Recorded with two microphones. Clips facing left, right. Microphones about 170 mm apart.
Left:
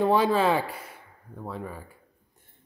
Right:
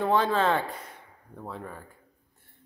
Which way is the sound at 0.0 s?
10° left (ahead or behind).